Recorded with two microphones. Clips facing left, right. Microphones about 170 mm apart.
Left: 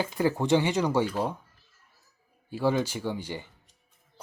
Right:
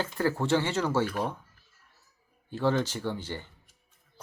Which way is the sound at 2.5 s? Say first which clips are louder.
Left 1 dB; 10° left (ahead or behind).